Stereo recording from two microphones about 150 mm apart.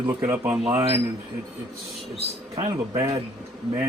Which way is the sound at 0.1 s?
15° right (ahead or behind).